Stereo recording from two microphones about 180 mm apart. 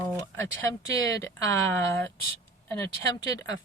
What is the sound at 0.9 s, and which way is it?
Speech, 20° left (ahead or behind).